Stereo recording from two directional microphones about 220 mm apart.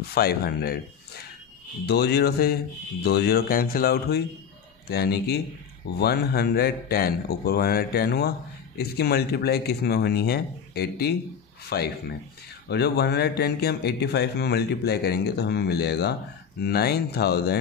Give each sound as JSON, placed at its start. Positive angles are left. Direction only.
{"t": 0.1, "sound": "speech", "side_deg": 45}